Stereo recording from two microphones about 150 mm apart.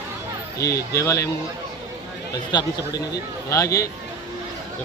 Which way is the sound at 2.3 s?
30° left (ahead or behind).